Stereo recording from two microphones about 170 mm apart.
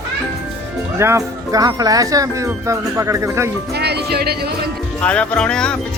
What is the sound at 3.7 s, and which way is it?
Music, 75° right (ahead or behind).